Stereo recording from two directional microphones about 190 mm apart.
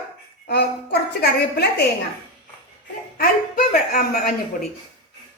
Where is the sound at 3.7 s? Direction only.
45° left (ahead or behind).